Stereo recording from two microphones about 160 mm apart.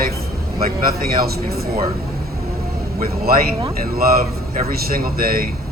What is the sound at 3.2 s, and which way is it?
Speech, 65° right (ahead or behind).